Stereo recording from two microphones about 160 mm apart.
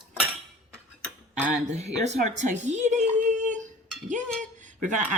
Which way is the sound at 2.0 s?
45° right (ahead or behind).